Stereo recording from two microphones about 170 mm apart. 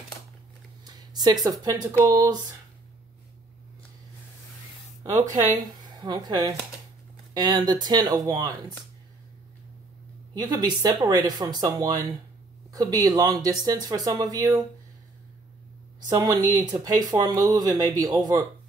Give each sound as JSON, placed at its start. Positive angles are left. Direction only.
{"t": 0.8, "sound": "speech", "side_deg": -25}
{"t": 5.6, "sound": "speech", "side_deg": -25}
{"t": 10.3, "sound": "speech", "side_deg": -25}
{"t": 16.1, "sound": "speech", "side_deg": -20}